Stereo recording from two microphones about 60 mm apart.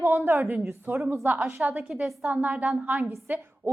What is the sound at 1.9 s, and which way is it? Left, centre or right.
Speech, centre.